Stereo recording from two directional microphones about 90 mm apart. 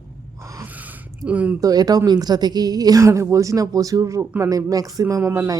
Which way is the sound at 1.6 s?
45° right (ahead or behind).